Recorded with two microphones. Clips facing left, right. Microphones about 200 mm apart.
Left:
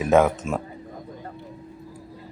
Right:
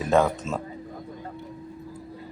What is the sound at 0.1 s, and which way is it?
Speech, 15° left (ahead or behind).